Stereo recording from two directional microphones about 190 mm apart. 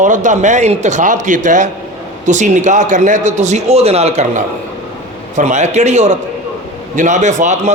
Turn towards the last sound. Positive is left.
turn(degrees=-40)  # may be behind; listen again after turning